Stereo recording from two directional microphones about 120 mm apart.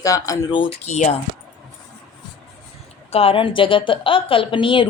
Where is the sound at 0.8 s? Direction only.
70° left (ahead or behind).